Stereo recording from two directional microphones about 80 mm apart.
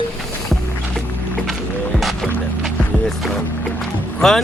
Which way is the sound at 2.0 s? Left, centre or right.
Centre.